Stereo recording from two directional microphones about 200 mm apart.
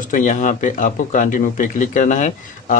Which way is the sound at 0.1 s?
40° left (ahead or behind).